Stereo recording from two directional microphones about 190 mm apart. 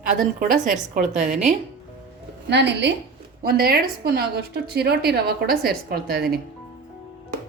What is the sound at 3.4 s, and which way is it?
A woman's voice, 55° right (ahead or behind).